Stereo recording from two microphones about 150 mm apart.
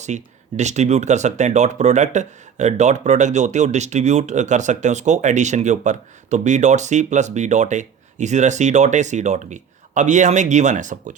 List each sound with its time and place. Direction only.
0.0 s speech: 50° right (ahead or behind)